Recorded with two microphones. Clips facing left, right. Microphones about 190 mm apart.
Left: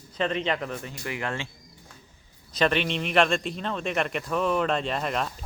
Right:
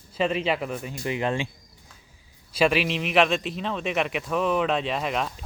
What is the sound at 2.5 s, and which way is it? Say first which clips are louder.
Speech: right 2 dB; 5° right (ahead or behind).